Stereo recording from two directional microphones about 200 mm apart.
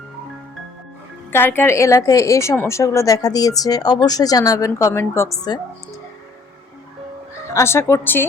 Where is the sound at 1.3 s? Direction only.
10° left (ahead or behind).